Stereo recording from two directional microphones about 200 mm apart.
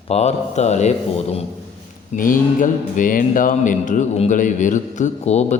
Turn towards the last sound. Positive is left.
turn(degrees=35)  # may be behind; listen again after turning